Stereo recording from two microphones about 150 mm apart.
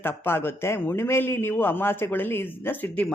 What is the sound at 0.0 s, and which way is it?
A woman's voice, 15° left (ahead or behind).